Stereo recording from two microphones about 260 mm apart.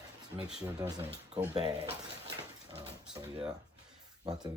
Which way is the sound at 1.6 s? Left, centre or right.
Right.